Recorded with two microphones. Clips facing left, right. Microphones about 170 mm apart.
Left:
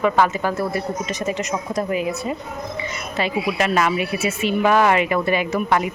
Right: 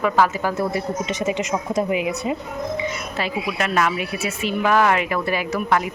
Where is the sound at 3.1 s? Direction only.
Centre (ahead or behind).